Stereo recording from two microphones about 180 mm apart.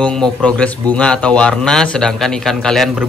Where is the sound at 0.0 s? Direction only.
5° left (ahead or behind).